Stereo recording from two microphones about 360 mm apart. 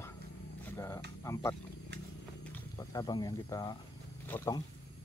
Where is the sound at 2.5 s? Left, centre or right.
Centre.